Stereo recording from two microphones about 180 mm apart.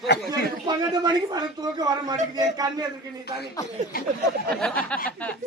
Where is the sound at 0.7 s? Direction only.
20° right (ahead or behind).